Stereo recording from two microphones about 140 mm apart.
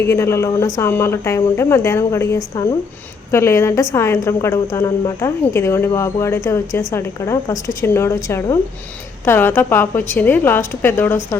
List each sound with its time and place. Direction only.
0.0 s a woman's voice: 20° left (ahead or behind)